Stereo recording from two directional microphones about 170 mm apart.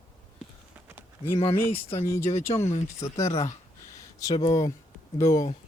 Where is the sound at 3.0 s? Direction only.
15° left (ahead or behind).